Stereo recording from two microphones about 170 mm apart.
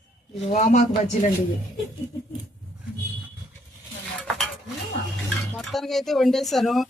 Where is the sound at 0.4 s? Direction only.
45° left (ahead or behind).